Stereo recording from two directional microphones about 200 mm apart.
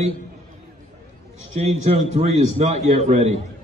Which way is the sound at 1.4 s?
35° right (ahead or behind).